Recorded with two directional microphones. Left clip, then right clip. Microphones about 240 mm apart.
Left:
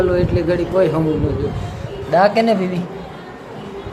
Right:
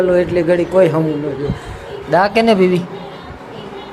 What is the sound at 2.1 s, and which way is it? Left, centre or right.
Speech, centre.